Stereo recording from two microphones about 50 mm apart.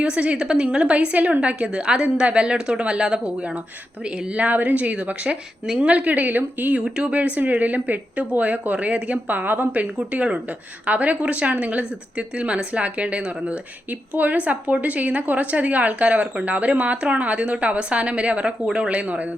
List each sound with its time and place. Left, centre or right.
0.0 s a woman's voice: right
0.3 s a woman's voice: centre; by 6.8 s right
6.8 s speech: centre
7.1 s a woman's voice: right
9.2 s a woman's voice: right